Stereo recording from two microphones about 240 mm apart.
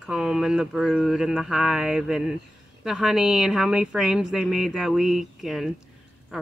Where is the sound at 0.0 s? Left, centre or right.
Centre.